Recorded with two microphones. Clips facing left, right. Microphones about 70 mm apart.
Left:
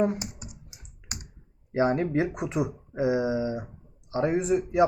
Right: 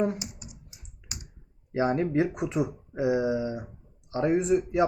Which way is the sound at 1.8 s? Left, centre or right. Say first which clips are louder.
Left 1 dB; centre.